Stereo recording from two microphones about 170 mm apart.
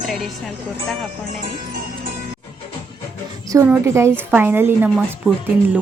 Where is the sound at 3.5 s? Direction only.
15° right (ahead or behind).